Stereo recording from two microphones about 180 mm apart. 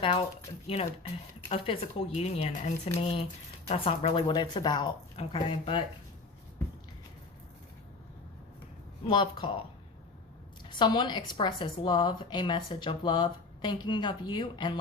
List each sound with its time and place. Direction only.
0.7 s a woman's voice: 35° left (ahead or behind)
9.0 s a woman's voice: 25° left (ahead or behind)
10.7 s a woman's voice: 25° left (ahead or behind)